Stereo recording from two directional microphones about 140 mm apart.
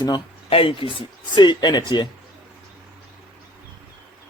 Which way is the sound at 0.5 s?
40° left (ahead or behind).